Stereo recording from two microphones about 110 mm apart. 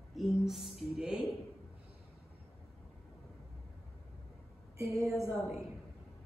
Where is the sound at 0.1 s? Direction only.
Centre (ahead or behind).